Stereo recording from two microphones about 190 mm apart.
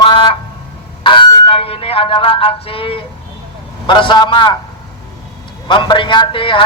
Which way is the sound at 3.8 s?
25° left (ahead or behind).